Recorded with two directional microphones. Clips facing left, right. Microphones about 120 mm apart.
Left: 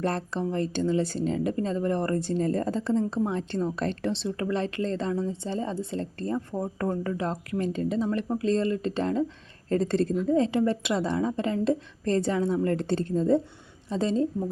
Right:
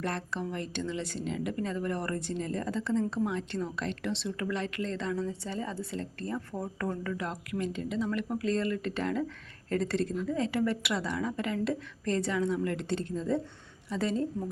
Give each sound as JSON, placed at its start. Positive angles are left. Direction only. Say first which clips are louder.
{"t": 0.0, "sound": "a woman's voice", "louder": "left 6 dB", "side_deg": 35}